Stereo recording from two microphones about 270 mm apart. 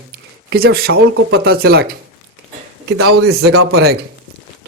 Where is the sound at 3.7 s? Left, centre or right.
Right.